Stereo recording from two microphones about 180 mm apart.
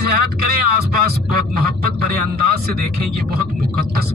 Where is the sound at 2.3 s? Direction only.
60° right (ahead or behind).